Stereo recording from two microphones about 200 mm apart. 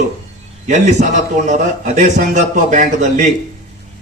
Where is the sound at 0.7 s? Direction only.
35° right (ahead or behind).